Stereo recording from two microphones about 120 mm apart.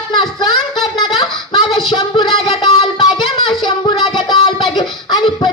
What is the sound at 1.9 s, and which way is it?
Music, 40° left (ahead or behind).